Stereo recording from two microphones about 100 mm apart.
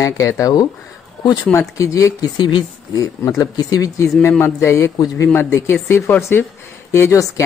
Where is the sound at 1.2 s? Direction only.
45° left (ahead or behind).